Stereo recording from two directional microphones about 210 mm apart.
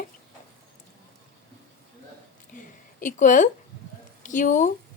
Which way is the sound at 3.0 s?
40° left (ahead or behind).